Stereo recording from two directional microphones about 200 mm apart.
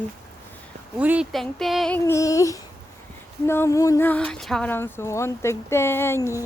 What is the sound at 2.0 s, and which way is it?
Speech, 15° left (ahead or behind).